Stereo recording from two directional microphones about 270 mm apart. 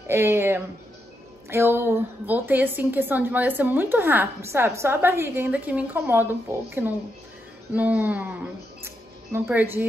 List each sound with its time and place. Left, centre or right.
0.1 s a woman's voice: centre